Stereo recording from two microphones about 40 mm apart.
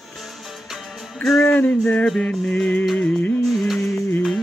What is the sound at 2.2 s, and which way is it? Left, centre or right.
Music, left.